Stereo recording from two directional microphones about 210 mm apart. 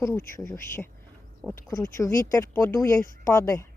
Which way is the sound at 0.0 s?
10° left (ahead or behind).